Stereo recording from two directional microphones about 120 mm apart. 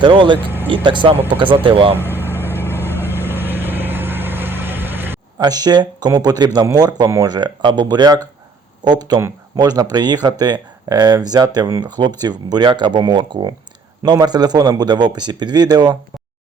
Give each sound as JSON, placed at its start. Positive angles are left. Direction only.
{"t": 0.0, "sound": "speech", "side_deg": -40}
{"t": 0.3, "sound": "speech", "side_deg": -15}
{"t": 0.7, "sound": "speech", "side_deg": -40}
{"t": 1.1, "sound": "speech", "side_deg": -15}
{"t": 1.6, "sound": "speech", "side_deg": -50}
{"t": 2.2, "sound": "vehicle", "side_deg": -20}
{"t": 5.4, "sound": "speech", "side_deg": -35}